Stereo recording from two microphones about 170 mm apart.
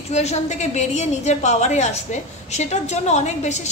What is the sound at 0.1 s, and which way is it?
A woman's voice, 40° left (ahead or behind).